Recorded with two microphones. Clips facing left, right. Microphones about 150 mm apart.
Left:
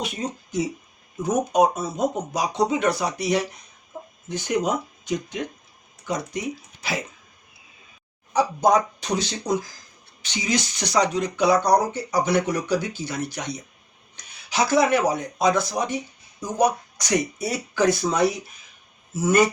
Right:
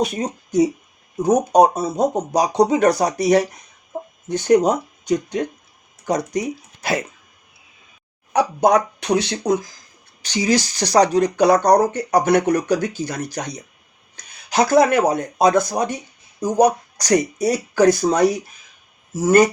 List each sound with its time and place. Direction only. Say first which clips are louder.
0.0 s speech: right 7 dB; 40° right (ahead or behind)
4.4 s speech: right 9 dB; 40° right (ahead or behind)
8.3 s speech: right 3 dB; 65° right (ahead or behind)
10.2 s speech: right 7 dB; 40° right (ahead or behind)
14.5 s speech: right 5 dB; 45° right (ahead or behind)